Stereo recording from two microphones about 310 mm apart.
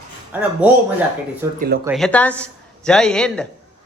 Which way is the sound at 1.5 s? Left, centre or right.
Right.